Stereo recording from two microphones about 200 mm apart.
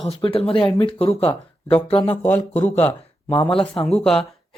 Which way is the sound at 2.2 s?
10° left (ahead or behind).